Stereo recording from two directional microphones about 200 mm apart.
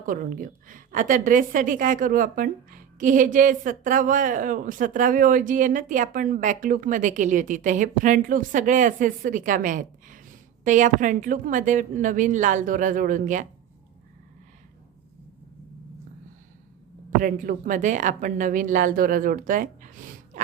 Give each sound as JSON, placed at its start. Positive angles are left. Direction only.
{"t": 0.0, "sound": "a woman's voice", "side_deg": -45}
{"t": 17.2, "sound": "a woman's voice", "side_deg": -45}